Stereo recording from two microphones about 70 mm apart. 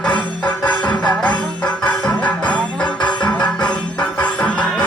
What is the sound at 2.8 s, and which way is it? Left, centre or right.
Music, left.